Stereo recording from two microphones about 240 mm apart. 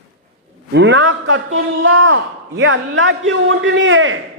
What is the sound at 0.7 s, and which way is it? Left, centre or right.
A man's voice, right.